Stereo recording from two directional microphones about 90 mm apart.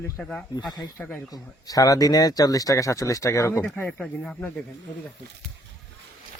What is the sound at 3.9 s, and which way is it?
Speech, 10° left (ahead or behind).